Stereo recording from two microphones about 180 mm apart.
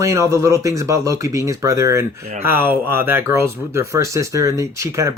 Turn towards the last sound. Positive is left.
turn(degrees=-15)  # may be behind; listen again after turning